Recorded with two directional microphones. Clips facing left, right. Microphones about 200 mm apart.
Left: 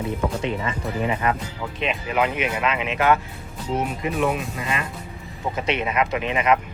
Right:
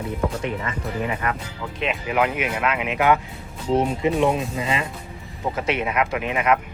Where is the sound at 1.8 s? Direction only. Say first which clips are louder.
Right 1 dB; centre (ahead or behind).